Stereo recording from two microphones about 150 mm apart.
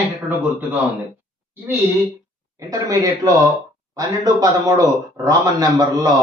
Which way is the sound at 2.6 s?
20° right (ahead or behind).